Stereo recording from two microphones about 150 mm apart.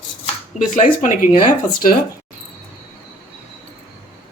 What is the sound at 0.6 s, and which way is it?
Speech, 60° left (ahead or behind).